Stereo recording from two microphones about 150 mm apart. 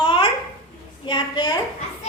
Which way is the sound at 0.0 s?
35° left (ahead or behind).